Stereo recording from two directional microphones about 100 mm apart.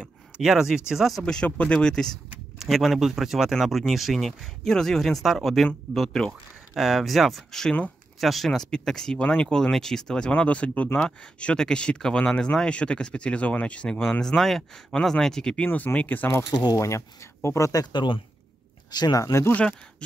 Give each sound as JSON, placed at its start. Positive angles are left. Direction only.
{"t": 0.0, "sound": "speech", "side_deg": -5}
{"t": 1.2, "sound": "speech", "side_deg": 10}
{"t": 2.6, "sound": "speech", "side_deg": 0}
{"t": 16.4, "sound": "speech", "side_deg": 45}
{"t": 16.7, "sound": "speech", "side_deg": 30}
{"t": 17.9, "sound": "speech", "side_deg": 55}
{"t": 18.9, "sound": "speech", "side_deg": 40}